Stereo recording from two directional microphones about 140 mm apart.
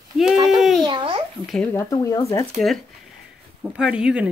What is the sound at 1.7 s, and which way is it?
Speech, 25° left (ahead or behind).